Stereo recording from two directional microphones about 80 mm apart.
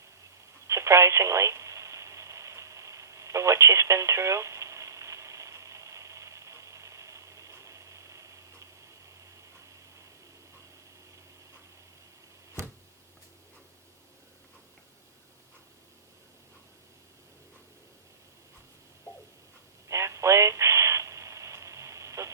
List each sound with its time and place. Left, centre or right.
0.7 s telephone: right
19.9 s radio: right